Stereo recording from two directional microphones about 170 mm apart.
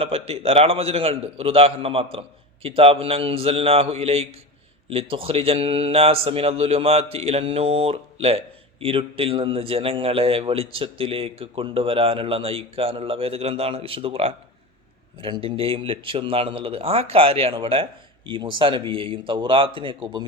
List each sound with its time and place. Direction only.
0.0 s a man's voice: 35° right (ahead or behind)